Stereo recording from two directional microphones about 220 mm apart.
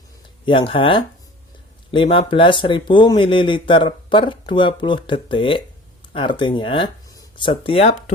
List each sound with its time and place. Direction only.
0.4 s speech: 20° left (ahead or behind)